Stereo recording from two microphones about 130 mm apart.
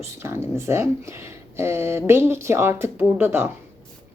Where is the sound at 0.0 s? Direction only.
20° right (ahead or behind).